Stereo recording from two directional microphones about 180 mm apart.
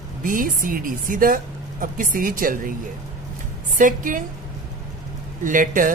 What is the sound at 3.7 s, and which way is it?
Speech, 50° right (ahead or behind).